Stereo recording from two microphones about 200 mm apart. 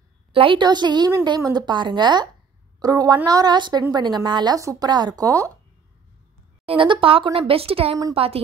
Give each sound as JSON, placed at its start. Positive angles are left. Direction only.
{"t": 0.3, "sound": "a woman's voice", "side_deg": -25}
{"t": 6.6, "sound": "a woman's voice", "side_deg": -25}